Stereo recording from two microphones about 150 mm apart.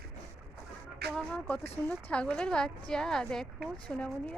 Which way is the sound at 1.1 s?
5° left (ahead or behind).